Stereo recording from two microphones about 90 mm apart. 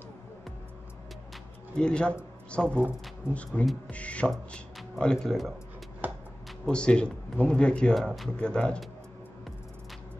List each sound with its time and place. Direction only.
1.8 s speech: 10° left (ahead or behind)
4.3 s speech: 5° left (ahead or behind)
6.0 s a sound: 20° right (ahead or behind)
6.6 s speech: 10° left (ahead or behind)